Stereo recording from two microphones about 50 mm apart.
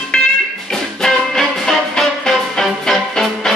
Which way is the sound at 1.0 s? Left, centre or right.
Centre.